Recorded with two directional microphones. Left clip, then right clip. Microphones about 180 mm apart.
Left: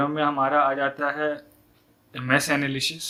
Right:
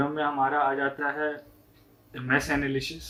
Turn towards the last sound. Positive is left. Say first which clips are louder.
# left 4 dB
turn(degrees=50)  # may be behind; listen again after turning